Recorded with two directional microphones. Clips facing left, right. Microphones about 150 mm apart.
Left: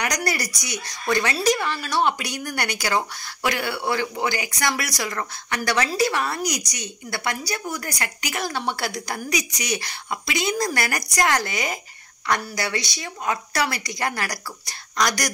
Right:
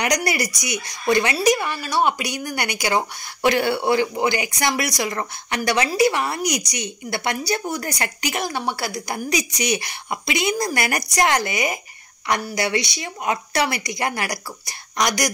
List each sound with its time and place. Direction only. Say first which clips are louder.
0.0 s speech: right 4 dB; 15° right (ahead or behind)
8.5 s speech: right 1 dB; 10° right (ahead or behind)
9.3 s speech: right 4 dB; 30° right (ahead or behind)